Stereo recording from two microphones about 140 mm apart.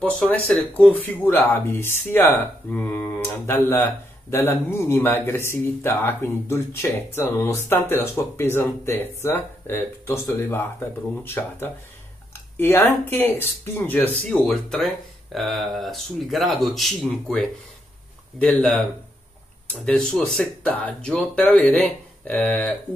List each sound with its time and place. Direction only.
0.0 s speech: 10° left (ahead or behind)
18.4 s speech: 5° left (ahead or behind)